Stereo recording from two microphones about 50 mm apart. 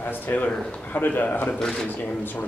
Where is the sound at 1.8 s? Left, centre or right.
Left.